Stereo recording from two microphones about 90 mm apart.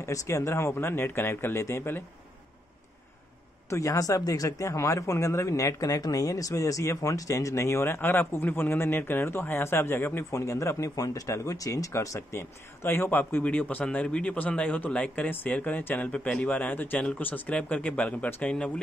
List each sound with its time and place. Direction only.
0.0 s speech: 35° left (ahead or behind)
3.6 s speech: 35° left (ahead or behind); by 18.7 s 15° left (ahead or behind)